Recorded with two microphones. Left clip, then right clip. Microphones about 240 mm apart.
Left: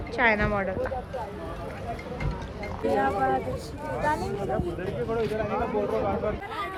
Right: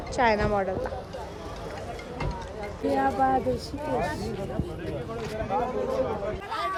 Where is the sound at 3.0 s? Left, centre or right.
Right.